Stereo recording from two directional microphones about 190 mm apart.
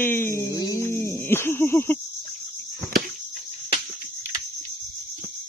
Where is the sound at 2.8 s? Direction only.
50° right (ahead or behind).